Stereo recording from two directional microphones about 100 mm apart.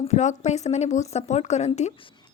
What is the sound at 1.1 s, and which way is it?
Speech, 90° left.